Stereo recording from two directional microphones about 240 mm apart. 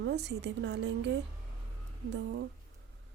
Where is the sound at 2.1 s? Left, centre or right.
Right.